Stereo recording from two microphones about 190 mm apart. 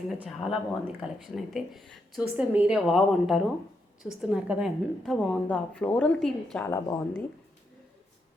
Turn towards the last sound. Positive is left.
turn(degrees=15)  # may be behind; listen again after turning